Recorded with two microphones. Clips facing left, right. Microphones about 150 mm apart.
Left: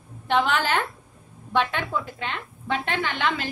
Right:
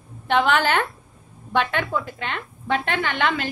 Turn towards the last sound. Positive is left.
turn(degrees=-60)  # may be behind; listen again after turning